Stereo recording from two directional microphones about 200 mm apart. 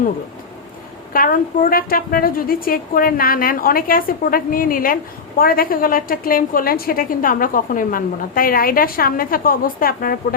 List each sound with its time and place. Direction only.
1.1 s a woman's voice: 45° left (ahead or behind)